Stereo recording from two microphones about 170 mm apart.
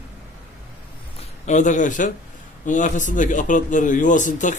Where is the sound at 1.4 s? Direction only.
45° left (ahead or behind).